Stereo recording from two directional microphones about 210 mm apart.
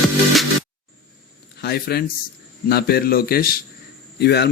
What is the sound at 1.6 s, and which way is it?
Speech, 50° left (ahead or behind).